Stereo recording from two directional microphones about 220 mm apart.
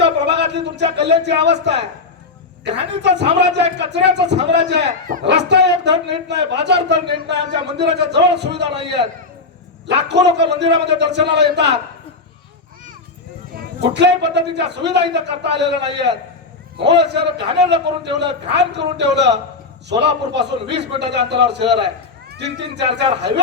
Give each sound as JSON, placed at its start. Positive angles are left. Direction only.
{"t": 0.5, "sound": "a man's voice", "side_deg": -50}
{"t": 10.1, "sound": "a man's voice", "side_deg": -50}
{"t": 13.9, "sound": "a man's voice", "side_deg": -50}
{"t": 20.3, "sound": "a man's voice", "side_deg": -50}